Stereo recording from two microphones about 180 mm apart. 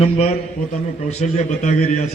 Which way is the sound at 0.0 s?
35° left (ahead or behind).